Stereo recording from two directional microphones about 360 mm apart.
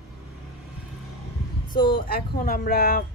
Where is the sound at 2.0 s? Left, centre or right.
Left.